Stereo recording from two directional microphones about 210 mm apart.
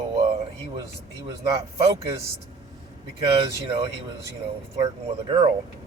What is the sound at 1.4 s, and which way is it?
Speech, 15° right (ahead or behind).